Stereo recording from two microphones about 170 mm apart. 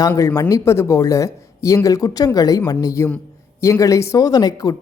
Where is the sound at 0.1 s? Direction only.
15° left (ahead or behind).